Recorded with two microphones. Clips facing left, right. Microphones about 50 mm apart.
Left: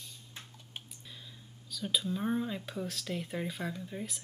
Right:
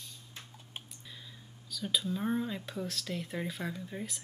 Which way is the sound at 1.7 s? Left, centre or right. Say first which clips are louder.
Even; centre.